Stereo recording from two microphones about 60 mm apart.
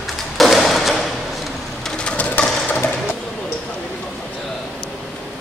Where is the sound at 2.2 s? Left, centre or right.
Left.